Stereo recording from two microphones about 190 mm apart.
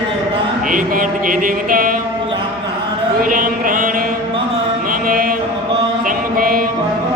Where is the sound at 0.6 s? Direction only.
45° right (ahead or behind).